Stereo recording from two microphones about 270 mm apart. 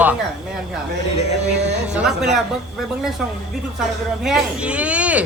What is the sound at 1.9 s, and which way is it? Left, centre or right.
Speech, centre.